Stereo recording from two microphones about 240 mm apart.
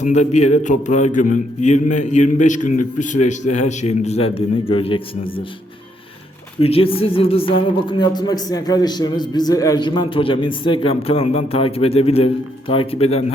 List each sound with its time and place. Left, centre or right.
0.0 s speech: left
6.6 s speech: left